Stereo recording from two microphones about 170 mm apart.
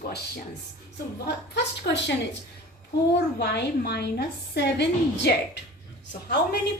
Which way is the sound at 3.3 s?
70° left (ahead or behind).